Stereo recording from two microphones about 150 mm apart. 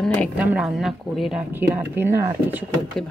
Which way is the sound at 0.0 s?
5° left (ahead or behind).